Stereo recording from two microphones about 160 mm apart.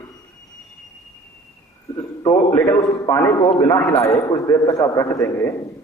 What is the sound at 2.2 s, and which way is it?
A man's voice, 20° left (ahead or behind).